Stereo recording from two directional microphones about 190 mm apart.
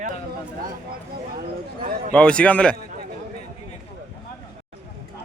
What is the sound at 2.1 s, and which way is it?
Speech, 5° left (ahead or behind).